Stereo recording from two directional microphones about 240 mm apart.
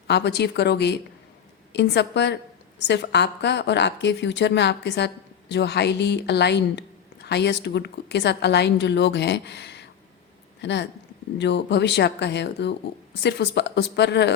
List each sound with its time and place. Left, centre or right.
0.1 s speech: left